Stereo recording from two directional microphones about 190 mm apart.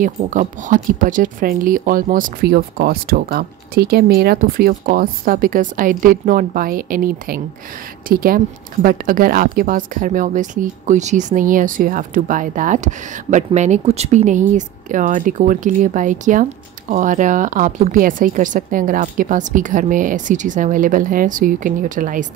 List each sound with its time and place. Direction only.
0.0 s speech: 45° right (ahead or behind)